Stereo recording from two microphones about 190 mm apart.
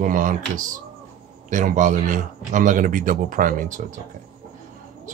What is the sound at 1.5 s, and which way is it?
Speech, 40° right (ahead or behind).